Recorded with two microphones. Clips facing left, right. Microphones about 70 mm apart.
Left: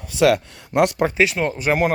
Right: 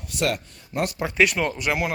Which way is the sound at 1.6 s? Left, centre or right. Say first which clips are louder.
Left 9 dB; left.